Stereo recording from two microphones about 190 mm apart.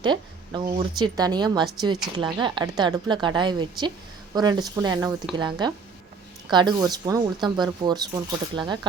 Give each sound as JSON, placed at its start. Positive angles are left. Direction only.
{"t": 0.0, "sound": "speech", "side_deg": -25}